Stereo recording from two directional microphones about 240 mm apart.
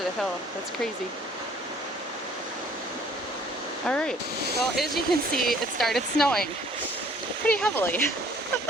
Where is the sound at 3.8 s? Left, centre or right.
Centre.